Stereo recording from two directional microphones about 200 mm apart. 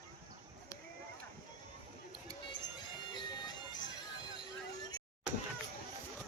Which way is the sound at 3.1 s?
20° left (ahead or behind).